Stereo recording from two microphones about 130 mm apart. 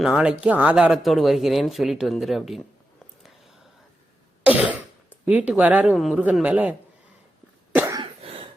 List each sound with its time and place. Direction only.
0.0 s speech: 5° right (ahead or behind)
4.4 s throat clearing: 10° right (ahead or behind)
5.2 s a man's voice: 10° right (ahead or behind)
5.9 s a man's voice: centre (ahead or behind)
7.7 s cough: 15° right (ahead or behind)